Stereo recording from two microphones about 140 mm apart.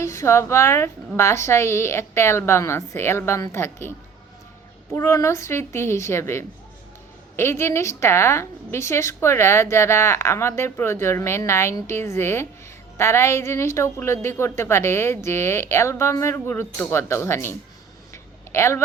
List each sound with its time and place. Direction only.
0.0 s a woman's voice: 20° left (ahead or behind)
4.9 s a woman's voice: 20° left (ahead or behind)
18.1 s a sound: 20° left (ahead or behind)